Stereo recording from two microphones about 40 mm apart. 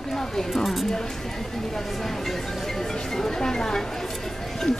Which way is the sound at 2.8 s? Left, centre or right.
Centre.